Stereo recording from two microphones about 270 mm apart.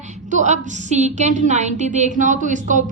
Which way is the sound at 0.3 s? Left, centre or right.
Right.